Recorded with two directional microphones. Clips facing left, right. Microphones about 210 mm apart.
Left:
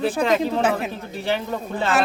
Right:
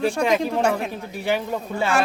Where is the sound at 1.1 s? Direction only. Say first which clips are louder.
Right 1 dB; 10° right (ahead or behind).